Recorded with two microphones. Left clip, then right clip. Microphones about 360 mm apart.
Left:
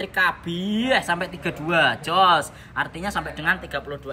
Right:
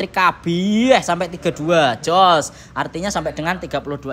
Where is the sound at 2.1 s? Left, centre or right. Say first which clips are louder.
Right 4 dB; centre.